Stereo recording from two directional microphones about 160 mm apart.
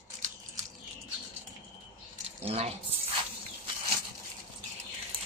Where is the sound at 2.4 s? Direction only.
40° right (ahead or behind).